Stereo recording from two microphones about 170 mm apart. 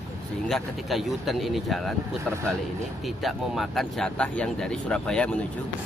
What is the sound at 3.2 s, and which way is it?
Speech, centre (ahead or behind).